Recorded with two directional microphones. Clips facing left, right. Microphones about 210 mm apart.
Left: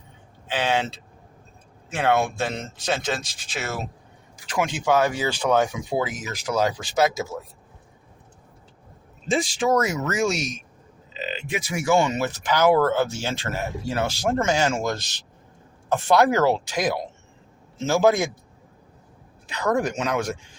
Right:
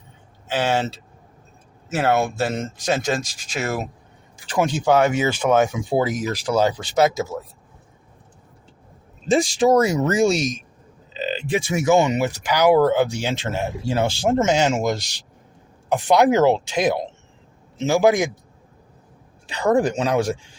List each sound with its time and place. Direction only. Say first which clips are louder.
0.6 s speech: right 2 dB; 45° right (ahead or behind)
1.9 s a man's voice: right 2 dB; 5° right (ahead or behind)
2.6 s speech: right 4 dB; 45° right (ahead or behind); by 6.0 s 20° right (ahead or behind)
6.0 s speech: right 8 dB; 35° right (ahead or behind)
9.3 s a man's voice: right 5 dB; 40° right (ahead or behind); by 18.3 s 15° right (ahead or behind)
19.5 s speech: right 5 dB; 30° right (ahead or behind)